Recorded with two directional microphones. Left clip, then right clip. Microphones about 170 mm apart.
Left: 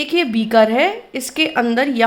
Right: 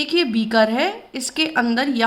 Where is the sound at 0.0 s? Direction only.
20° left (ahead or behind).